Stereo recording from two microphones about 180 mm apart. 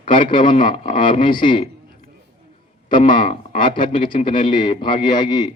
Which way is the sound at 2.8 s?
25° left (ahead or behind).